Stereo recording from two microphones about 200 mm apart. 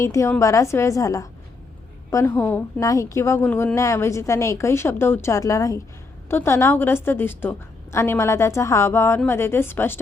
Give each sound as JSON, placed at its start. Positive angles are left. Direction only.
{"t": 0.0, "sound": "a woman's voice", "side_deg": 15}